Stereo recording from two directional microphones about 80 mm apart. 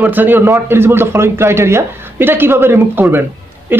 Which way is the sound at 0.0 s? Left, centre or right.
Right.